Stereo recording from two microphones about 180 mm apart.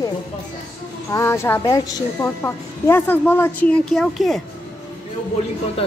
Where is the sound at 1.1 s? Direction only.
15° left (ahead or behind).